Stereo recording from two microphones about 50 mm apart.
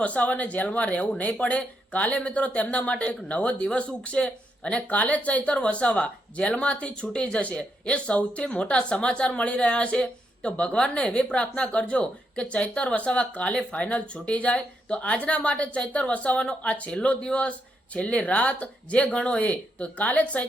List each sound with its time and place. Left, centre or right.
0.0 s speech: left